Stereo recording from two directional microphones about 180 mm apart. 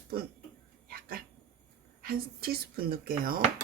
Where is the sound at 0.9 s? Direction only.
55° right (ahead or behind).